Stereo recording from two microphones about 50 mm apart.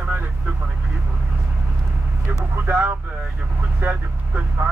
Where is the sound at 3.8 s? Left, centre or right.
Right.